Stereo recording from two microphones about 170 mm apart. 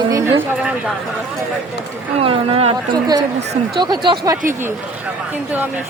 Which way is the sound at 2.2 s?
35° right (ahead or behind).